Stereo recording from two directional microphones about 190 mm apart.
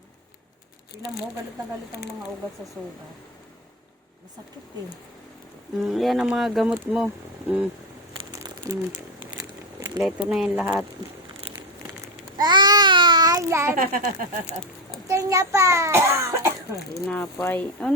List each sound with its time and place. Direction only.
5.7 s speech: centre (ahead or behind)
8.2 s a sound: 20° right (ahead or behind)
10.2 s speech: 5° right (ahead or behind)
12.4 s babbling: 20° right (ahead or behind)
13.7 s speech: 50° right (ahead or behind)
15.0 s a child's voice: 15° right (ahead or behind)
16.9 s speech: 5° left (ahead or behind)